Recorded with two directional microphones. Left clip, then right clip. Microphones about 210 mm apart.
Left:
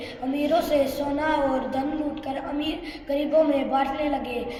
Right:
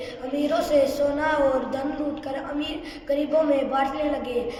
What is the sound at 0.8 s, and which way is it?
A woman's voice, 15° right (ahead or behind).